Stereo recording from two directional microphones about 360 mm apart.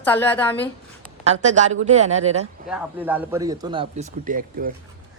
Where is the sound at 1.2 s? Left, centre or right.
Centre.